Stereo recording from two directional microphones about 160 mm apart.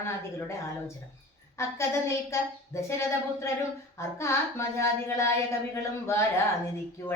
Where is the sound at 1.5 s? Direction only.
15° left (ahead or behind).